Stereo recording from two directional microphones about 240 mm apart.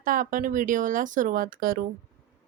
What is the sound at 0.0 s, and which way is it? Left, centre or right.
Speech, right.